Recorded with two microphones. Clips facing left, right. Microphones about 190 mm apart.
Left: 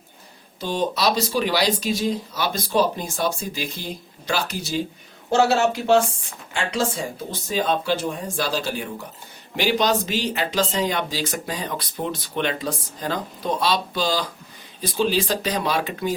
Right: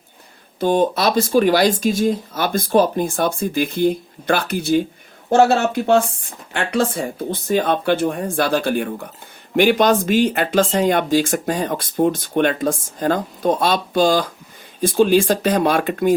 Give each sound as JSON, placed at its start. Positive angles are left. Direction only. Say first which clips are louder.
{"t": 0.6, "sound": "speech", "louder": "right 6 dB", "side_deg": -55}